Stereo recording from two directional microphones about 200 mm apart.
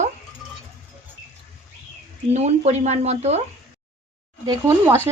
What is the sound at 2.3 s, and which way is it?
A woman's voice, 35° right (ahead or behind).